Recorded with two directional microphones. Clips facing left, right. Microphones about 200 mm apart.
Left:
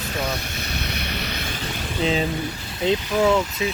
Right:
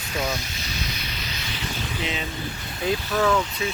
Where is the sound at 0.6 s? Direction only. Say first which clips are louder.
Left 4 dB; 60° left (ahead or behind).